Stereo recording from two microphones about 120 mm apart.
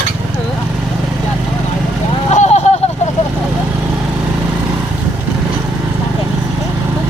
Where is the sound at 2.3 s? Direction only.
70° left (ahead or behind).